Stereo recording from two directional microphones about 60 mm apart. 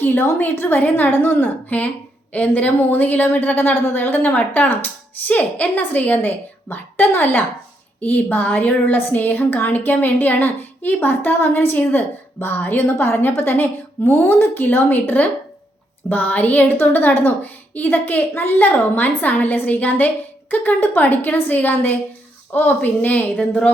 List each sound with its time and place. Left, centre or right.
0.0 s a woman's voice: left
0.8 s a woman's voice: left
1.1 s a woman's voice: left